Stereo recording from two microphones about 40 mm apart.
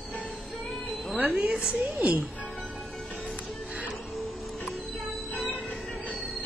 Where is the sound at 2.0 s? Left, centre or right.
Right.